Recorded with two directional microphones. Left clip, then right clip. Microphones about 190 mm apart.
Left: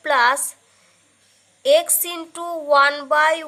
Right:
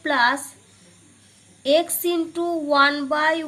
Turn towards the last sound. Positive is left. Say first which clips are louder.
# left 4 dB
turn(degrees=40)  # may be behind; listen again after turning